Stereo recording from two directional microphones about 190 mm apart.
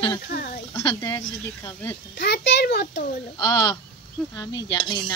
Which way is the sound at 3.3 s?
20° left (ahead or behind).